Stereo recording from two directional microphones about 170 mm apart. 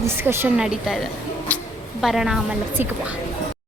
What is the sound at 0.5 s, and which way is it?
A woman's voice, 5° right (ahead or behind).